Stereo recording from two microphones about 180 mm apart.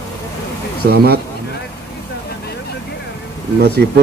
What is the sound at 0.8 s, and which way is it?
Speech, 60° right (ahead or behind).